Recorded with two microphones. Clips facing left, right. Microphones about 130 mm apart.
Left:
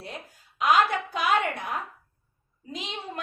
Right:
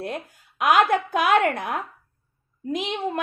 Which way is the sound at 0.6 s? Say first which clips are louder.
Right 4 dB; 55° right (ahead or behind).